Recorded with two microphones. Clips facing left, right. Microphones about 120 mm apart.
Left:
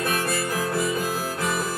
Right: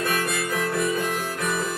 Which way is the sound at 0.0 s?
30° left (ahead or behind).